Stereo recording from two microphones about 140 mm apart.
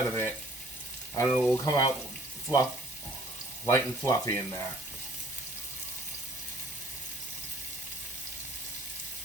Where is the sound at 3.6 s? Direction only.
20° left (ahead or behind).